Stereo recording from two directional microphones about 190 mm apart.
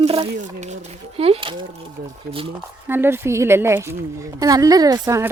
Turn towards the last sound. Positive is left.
turn(degrees=-20)  # may be behind; listen again after turning